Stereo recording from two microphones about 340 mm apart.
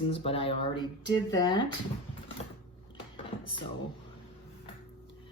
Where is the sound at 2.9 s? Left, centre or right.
Centre.